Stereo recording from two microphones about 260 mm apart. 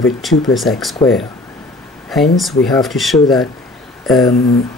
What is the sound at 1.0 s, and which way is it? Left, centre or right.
Speech, centre.